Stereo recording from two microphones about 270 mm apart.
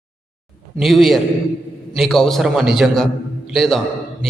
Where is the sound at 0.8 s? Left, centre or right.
Centre.